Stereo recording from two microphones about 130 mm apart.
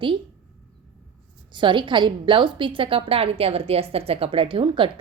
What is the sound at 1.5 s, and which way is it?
A woman's voice, 40° right (ahead or behind).